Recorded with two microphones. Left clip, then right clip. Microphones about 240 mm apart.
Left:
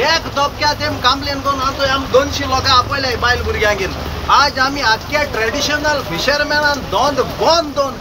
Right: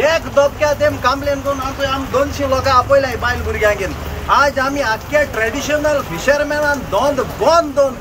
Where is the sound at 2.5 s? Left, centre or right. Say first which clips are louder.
Right 3 dB; right.